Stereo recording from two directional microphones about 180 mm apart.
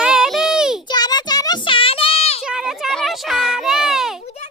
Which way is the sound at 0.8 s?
20° left (ahead or behind).